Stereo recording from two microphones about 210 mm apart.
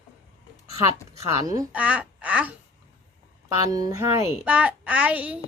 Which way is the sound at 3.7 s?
15° right (ahead or behind).